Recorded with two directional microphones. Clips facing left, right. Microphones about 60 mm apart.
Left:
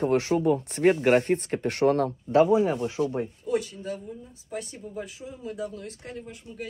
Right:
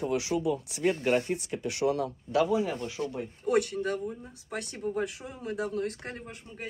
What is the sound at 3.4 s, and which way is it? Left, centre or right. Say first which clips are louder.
Speech: right 5 dB; right.